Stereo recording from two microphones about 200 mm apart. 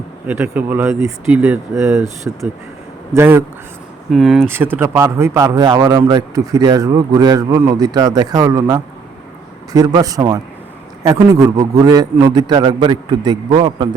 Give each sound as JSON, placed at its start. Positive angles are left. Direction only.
{"t": 0.3, "sound": "speech", "side_deg": -10}